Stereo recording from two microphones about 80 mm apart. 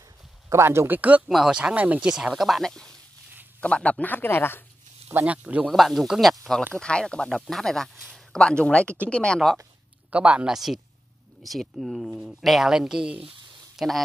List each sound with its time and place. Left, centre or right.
0.5 s speech: right
1.3 s speech: centre; by 4.6 s left
5.2 s speech: centre
5.7 s speech: centre
10.1 s speech: centre